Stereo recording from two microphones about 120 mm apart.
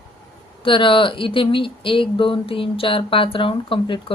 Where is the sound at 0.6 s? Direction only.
45° left (ahead or behind).